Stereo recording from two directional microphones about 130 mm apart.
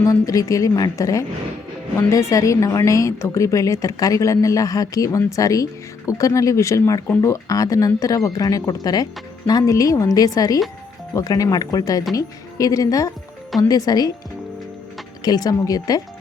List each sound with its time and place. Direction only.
0.0 s a woman's voice: 25° left (ahead or behind)
15.2 s a woman's voice: 30° left (ahead or behind)